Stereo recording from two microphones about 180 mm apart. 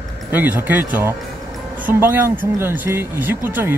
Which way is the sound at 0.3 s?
10° right (ahead or behind).